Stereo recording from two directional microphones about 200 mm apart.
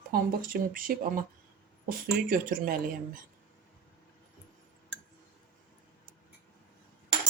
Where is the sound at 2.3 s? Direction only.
45° right (ahead or behind).